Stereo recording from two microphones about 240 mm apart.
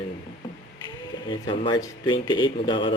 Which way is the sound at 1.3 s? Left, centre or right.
Centre.